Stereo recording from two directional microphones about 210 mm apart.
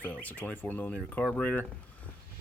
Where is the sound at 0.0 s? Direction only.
10° left (ahead or behind).